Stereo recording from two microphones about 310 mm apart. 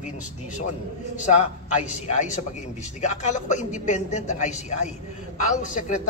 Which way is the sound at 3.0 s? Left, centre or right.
Left.